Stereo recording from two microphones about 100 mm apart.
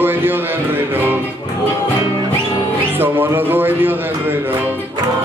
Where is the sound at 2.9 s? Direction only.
20° right (ahead or behind).